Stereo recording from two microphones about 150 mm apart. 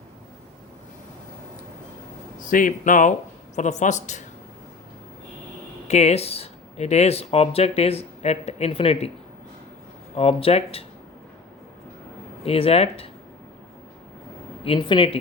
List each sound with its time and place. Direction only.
2.4 s speech: 65° left (ahead or behind)
5.9 s speech: 45° left (ahead or behind)
10.2 s speech: 40° left (ahead or behind)
12.5 s speech: 40° left (ahead or behind)
14.6 s speech: 35° left (ahead or behind)